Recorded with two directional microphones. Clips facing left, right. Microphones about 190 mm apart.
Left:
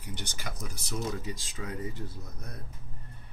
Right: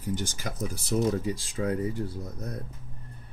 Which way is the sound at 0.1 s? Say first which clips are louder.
Right 8 dB; 45° right (ahead or behind).